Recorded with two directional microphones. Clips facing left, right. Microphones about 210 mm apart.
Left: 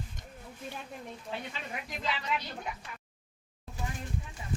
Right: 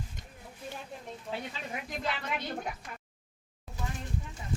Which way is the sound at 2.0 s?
55° right (ahead or behind).